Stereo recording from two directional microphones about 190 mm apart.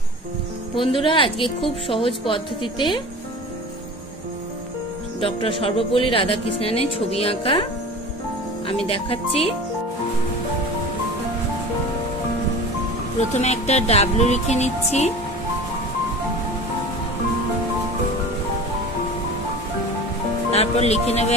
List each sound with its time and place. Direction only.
0.7 s speech: 25° left (ahead or behind)
5.2 s speech: 30° left (ahead or behind)
8.6 s speech: 30° left (ahead or behind)
13.2 s speech: 35° left (ahead or behind)
20.5 s speech: 35° left (ahead or behind)